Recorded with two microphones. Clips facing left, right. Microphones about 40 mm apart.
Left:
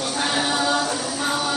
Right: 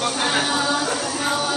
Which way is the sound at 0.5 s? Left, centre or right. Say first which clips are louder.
Even; centre.